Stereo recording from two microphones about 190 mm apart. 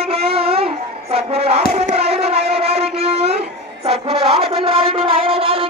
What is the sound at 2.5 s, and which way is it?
Music, 30° right (ahead or behind).